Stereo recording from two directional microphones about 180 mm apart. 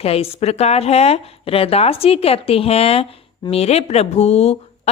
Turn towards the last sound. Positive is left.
turn(degrees=35)  # may be behind; listen again after turning